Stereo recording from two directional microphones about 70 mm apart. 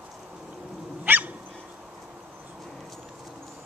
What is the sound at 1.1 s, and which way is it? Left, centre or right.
Dog, right.